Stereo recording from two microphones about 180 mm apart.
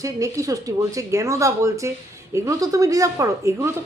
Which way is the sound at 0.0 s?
20° right (ahead or behind).